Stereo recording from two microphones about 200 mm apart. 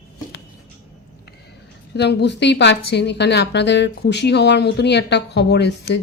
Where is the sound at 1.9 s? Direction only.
55° left (ahead or behind).